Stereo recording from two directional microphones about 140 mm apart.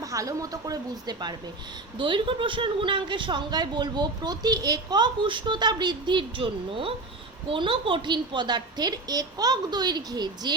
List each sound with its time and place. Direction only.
0.0 s a woman's voice: 25° right (ahead or behind)